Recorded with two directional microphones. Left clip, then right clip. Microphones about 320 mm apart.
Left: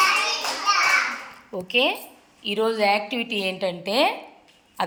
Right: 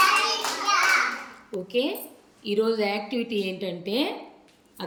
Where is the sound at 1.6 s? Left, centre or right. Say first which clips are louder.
Left 6 dB; centre.